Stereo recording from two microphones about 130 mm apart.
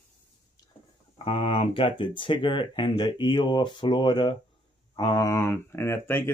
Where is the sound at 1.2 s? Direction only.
45° left (ahead or behind).